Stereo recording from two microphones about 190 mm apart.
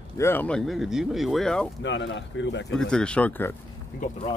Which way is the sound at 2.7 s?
5° left (ahead or behind).